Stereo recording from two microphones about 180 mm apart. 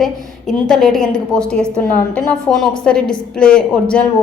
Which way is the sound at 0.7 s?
Centre (ahead or behind).